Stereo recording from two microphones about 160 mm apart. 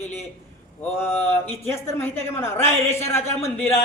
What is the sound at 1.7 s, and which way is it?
A man's voice, 15° left (ahead or behind).